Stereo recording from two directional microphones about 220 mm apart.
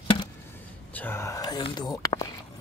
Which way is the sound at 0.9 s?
10° left (ahead or behind).